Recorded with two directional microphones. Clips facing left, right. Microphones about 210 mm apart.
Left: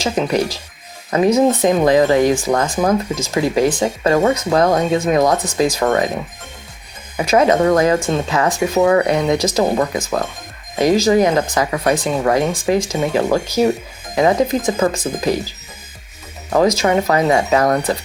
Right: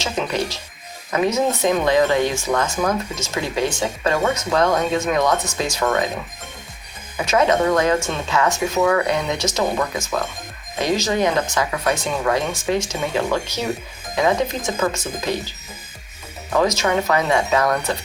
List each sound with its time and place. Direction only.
0.0 s speech: 35° left (ahead or behind)
7.3 s speech: 35° left (ahead or behind)
16.5 s speech: 35° left (ahead or behind)